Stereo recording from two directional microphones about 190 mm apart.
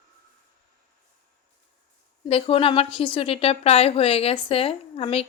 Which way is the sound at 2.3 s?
30° left (ahead or behind).